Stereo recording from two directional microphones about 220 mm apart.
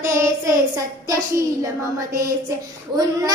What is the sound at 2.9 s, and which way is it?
Child singing, 15° right (ahead or behind).